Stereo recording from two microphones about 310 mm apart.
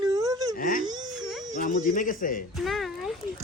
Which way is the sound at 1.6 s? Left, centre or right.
Left.